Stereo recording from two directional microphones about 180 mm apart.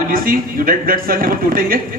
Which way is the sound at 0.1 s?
50° right (ahead or behind).